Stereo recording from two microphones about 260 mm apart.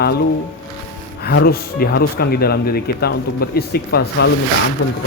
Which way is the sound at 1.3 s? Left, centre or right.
Left.